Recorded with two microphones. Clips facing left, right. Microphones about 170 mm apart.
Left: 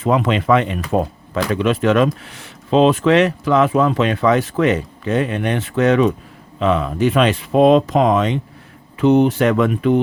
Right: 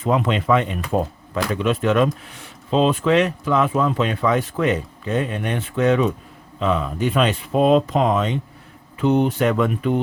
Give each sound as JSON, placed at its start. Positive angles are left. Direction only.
{"t": 0.0, "sound": "speech", "side_deg": 90}